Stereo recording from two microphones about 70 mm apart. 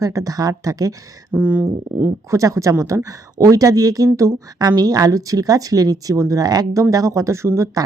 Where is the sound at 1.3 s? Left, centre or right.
Centre.